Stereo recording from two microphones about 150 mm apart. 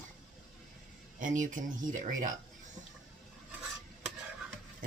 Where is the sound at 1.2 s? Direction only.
60° right (ahead or behind).